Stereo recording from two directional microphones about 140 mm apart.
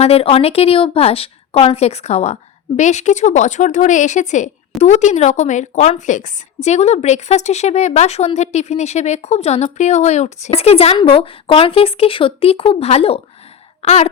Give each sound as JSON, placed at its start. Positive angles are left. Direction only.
{"t": 0.0, "sound": "a woman's voice", "side_deg": 45}
{"t": 13.8, "sound": "throat clearing", "side_deg": 55}